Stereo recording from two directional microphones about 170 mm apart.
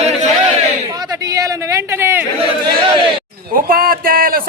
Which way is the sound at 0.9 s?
20° right (ahead or behind).